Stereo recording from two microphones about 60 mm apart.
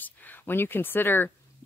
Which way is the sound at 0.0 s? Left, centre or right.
Left.